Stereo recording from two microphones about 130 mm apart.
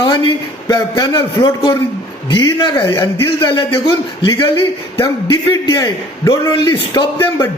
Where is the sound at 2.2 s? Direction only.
35° left (ahead or behind).